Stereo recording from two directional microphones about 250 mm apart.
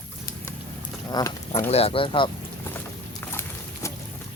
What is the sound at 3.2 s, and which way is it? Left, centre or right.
Horse, centre.